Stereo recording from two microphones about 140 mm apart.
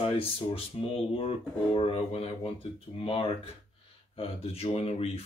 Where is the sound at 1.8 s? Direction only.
45° left (ahead or behind).